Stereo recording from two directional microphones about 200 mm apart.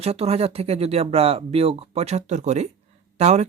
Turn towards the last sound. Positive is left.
turn(degrees=-35)  # may be behind; listen again after turning